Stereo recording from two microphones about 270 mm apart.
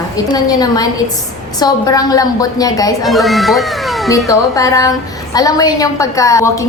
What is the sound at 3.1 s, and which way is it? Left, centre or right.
Speech, centre.